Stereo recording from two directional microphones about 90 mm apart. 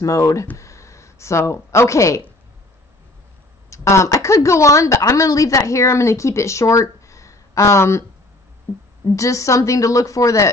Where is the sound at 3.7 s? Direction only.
35° left (ahead or behind).